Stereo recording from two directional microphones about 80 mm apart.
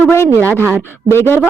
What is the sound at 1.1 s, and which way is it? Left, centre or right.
Speech, left.